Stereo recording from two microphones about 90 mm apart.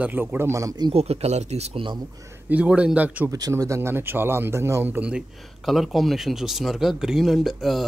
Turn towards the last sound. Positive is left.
turn(degrees=0)  # may be behind; listen again after turning